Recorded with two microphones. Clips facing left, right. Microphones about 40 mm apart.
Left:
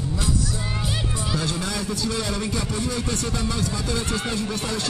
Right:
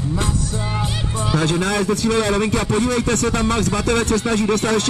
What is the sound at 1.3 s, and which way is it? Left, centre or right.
A man's voice, right.